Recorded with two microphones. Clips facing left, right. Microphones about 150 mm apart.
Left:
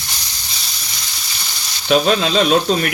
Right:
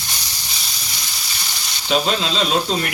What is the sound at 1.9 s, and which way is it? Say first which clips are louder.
Speech: left 5 dB; 60° left (ahead or behind).